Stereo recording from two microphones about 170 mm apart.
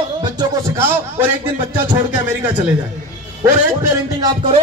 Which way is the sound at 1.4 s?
25° right (ahead or behind).